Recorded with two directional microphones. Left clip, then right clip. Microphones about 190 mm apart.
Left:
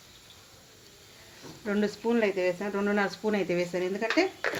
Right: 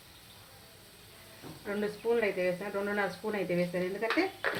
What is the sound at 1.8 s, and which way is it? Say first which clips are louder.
Speech: left 2 dB; 55° left (ahead or behind).